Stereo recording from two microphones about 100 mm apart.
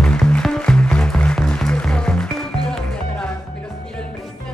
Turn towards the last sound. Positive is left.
turn(degrees=10)  # may be behind; listen again after turning